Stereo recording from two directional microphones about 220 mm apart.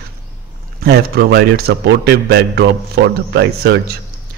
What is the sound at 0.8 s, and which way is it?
A man's voice, 45° right (ahead or behind).